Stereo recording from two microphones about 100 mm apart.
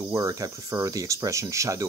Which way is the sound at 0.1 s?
35° right (ahead or behind).